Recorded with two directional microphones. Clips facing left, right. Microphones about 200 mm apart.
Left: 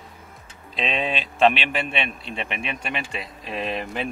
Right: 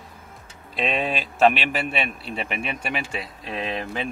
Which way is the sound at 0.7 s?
5° right (ahead or behind).